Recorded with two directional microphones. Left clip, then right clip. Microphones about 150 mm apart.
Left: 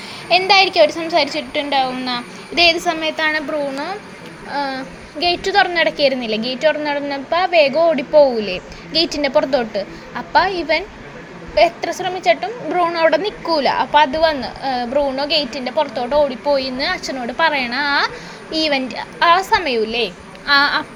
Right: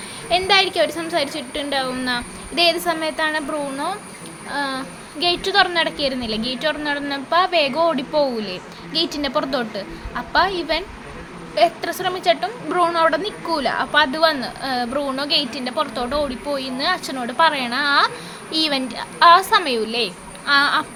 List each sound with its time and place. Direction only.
0.3 s a woman's voice: 10° left (ahead or behind)
12.9 s a woman's voice: 15° left (ahead or behind)
16.5 s a woman's voice: 20° left (ahead or behind); by 20.1 s 5° left (ahead or behind)
20.5 s a sound: 20° left (ahead or behind)